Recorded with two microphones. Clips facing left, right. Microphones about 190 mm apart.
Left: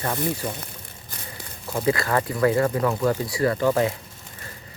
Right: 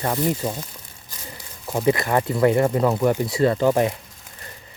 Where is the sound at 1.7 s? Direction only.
20° right (ahead or behind).